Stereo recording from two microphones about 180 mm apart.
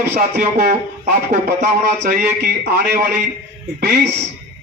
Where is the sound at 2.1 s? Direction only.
55° right (ahead or behind).